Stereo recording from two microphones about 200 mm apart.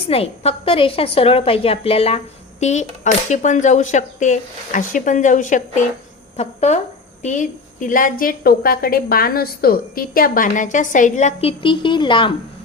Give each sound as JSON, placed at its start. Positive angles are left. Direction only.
{"t": 0.1, "sound": "a woman's voice", "side_deg": 30}